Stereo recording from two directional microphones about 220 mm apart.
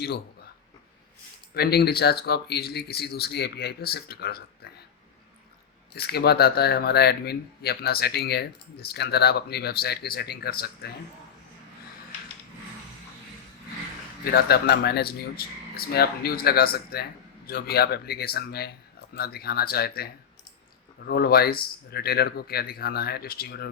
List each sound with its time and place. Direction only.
1.5 s speech: 45° left (ahead or behind)
5.9 s speech: 45° left (ahead or behind)
14.3 s speech: 45° left (ahead or behind)